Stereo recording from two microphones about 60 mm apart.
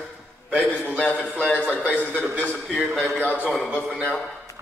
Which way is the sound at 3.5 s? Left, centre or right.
Centre.